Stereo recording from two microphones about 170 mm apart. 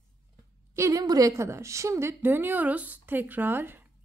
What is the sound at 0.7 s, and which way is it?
A woman's voice, 20° right (ahead or behind).